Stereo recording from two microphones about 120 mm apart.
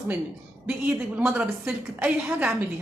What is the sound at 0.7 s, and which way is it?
A woman's voice, 10° right (ahead or behind).